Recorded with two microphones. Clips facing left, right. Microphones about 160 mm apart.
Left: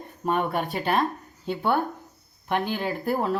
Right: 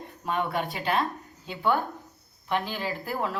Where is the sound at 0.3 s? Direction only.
50° left (ahead or behind).